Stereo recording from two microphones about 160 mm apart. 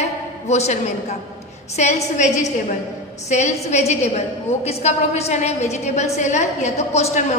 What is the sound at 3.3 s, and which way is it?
A woman's voice, 45° left (ahead or behind).